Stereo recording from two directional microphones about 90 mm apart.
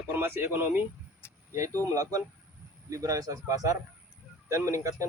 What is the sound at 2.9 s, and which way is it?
Speech, 40° right (ahead or behind).